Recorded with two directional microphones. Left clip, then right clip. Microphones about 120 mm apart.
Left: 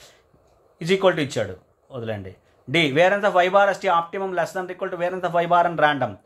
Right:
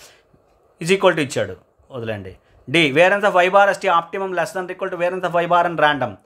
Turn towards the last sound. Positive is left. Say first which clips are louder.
# right 2 dB
turn(degrees=-25)  # may be behind; listen again after turning